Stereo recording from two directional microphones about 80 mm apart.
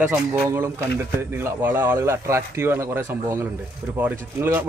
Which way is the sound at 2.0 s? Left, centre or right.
Right.